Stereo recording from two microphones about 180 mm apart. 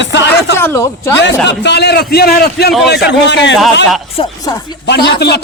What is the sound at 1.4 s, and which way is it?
A man's voice, 70° left (ahead or behind).